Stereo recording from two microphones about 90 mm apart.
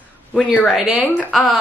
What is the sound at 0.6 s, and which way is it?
Speech, 5° right (ahead or behind).